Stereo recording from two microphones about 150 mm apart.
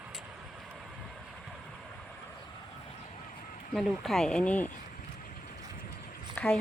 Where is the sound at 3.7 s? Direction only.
Centre (ahead or behind).